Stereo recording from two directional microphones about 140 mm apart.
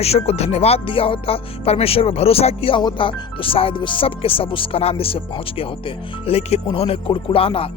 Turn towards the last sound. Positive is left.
turn(degrees=40)  # may be behind; listen again after turning